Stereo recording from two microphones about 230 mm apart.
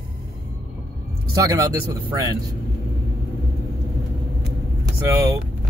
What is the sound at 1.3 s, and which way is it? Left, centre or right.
Speech, centre.